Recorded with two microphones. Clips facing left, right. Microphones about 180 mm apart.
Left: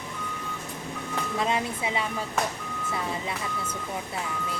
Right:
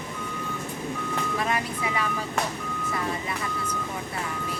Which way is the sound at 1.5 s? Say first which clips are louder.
Even; 25° left (ahead or behind).